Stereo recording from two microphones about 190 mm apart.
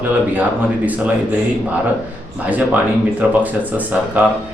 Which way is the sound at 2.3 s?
10° right (ahead or behind).